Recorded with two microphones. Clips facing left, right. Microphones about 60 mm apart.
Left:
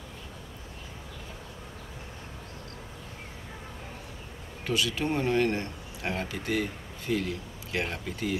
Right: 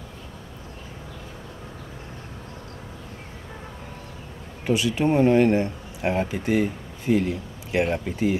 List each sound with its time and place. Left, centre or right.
4.6 s speech: centre